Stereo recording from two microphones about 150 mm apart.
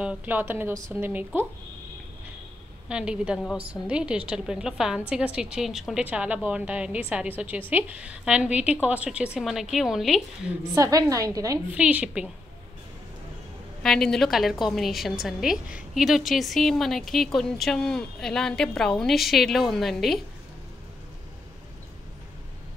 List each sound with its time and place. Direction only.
0.0 s a woman's voice: 10° right (ahead or behind)
2.9 s a woman's voice: 5° right (ahead or behind)
10.7 s a woman's voice: 20° right (ahead or behind)
11.7 s a woman's voice: 10° right (ahead or behind)
13.8 s a woman's voice: 5° left (ahead or behind)